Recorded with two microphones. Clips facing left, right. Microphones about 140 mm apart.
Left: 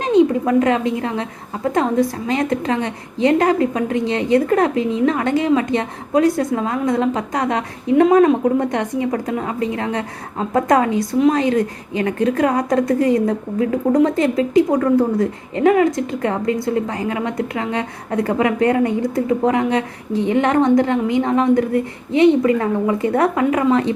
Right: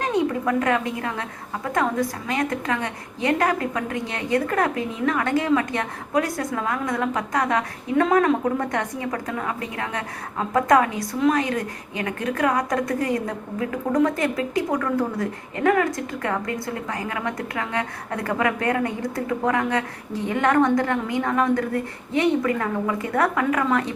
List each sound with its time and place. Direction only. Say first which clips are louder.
0.0 s a woman's voice: left 8 dB; 20° left (ahead or behind)